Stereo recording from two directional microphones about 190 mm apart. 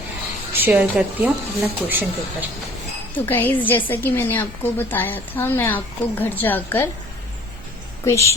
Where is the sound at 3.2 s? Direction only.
10° left (ahead or behind).